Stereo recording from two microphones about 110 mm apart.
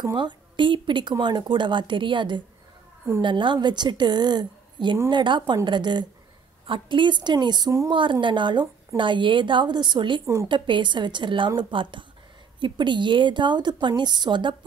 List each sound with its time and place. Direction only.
0.0 s a woman's voice: 45° right (ahead or behind)